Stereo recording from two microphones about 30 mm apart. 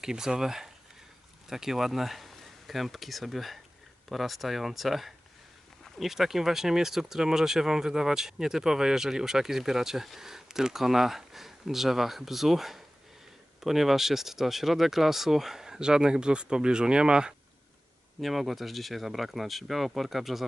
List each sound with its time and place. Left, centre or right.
0.0 s speech: centre
18.2 s speech: centre